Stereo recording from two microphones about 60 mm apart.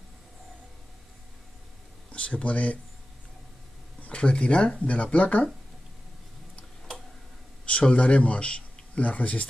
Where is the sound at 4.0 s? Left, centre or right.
Centre.